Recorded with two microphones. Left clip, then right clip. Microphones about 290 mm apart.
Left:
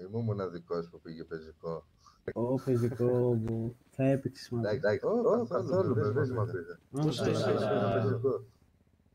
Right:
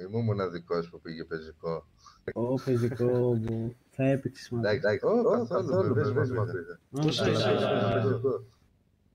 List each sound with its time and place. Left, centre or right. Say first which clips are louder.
0.0 s a man's voice: right 5 dB; centre
5.0 s a man's voice: right 3 dB; right